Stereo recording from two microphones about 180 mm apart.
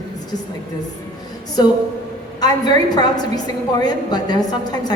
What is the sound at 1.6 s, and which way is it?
A woman's voice, 25° left (ahead or behind).